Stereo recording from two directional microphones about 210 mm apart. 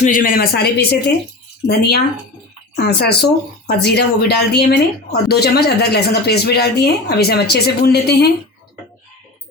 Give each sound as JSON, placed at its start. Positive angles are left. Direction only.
{"t": 0.0, "sound": "speech", "side_deg": 40}